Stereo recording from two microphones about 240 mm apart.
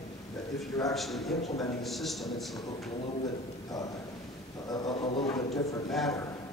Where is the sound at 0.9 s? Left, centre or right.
Centre.